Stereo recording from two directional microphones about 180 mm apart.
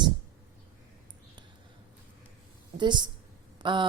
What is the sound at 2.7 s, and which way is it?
Speech, 25° right (ahead or behind).